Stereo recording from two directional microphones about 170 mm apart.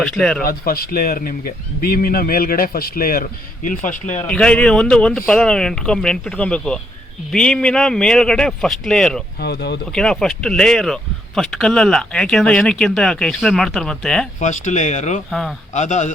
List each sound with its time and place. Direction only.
0.0 s speech: 5° left (ahead or behind)
0.4 s speech: 60° left (ahead or behind)
4.2 s speech: 5° left (ahead or behind)
9.4 s speech: 75° left (ahead or behind)
9.9 s speech: 5° left (ahead or behind)
14.3 s speech: 45° left (ahead or behind)
15.3 s speech: centre (ahead or behind)
15.7 s speech: 45° left (ahead or behind)